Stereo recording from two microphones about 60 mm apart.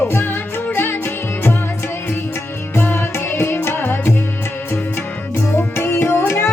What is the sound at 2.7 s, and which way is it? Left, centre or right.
Music, left.